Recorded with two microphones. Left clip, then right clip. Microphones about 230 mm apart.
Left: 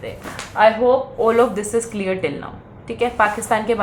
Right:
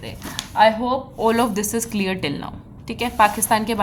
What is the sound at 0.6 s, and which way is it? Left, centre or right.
A woman's voice, right.